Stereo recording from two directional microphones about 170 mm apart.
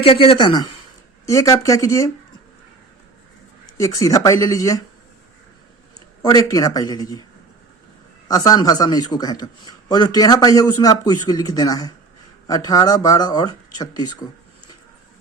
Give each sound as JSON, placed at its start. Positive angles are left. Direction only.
{"t": 0.0, "sound": "a man's voice", "side_deg": 30}
{"t": 3.8, "sound": "a man's voice", "side_deg": 20}
{"t": 6.2, "sound": "a man's voice", "side_deg": 20}
{"t": 8.3, "sound": "a man's voice", "side_deg": 20}